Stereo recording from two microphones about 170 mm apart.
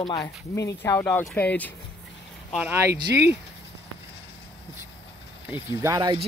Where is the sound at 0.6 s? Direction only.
15° left (ahead or behind).